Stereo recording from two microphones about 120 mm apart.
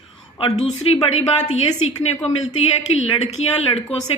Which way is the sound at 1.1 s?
65° left (ahead or behind).